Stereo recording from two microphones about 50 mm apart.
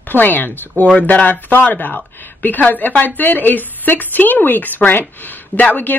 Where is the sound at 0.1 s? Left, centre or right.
Left.